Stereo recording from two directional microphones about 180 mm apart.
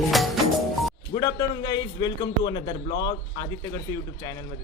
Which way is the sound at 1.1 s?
20° left (ahead or behind).